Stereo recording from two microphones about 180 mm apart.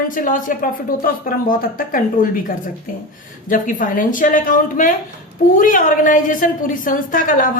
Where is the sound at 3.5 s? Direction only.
45° left (ahead or behind).